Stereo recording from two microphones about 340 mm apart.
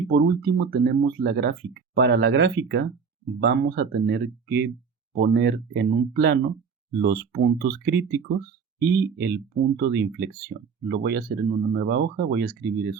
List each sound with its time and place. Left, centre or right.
0.1 s speech: right